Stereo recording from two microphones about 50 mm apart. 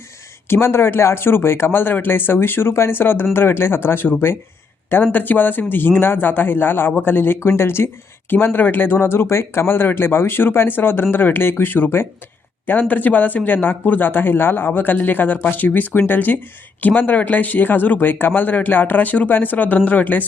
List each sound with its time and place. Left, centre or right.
0.4 s speech: left
5.1 s speech: left
7.3 s speech: left
8.3 s speech: left
12.9 s speech: left